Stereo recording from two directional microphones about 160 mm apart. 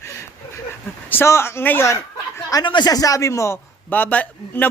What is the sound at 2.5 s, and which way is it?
A man's voice, 25° left (ahead or behind).